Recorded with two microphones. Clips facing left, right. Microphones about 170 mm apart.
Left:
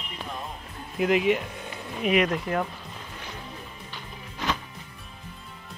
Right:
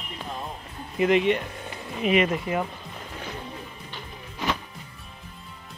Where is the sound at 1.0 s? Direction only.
Centre (ahead or behind).